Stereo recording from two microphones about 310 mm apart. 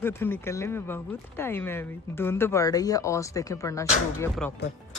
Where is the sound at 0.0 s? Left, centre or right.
Centre.